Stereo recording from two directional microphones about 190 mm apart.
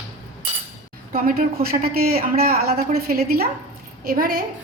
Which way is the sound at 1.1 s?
50° right (ahead or behind).